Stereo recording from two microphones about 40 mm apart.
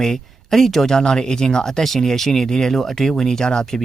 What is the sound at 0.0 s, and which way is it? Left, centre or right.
Speech, centre.